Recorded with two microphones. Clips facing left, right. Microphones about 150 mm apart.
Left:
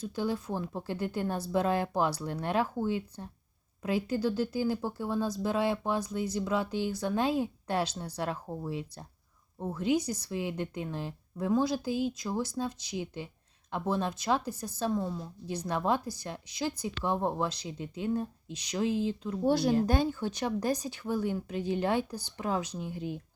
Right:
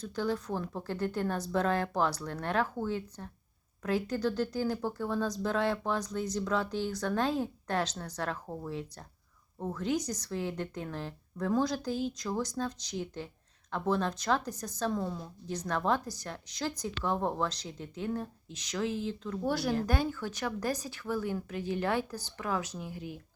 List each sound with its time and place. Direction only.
0.0 s speech: 10° left (ahead or behind)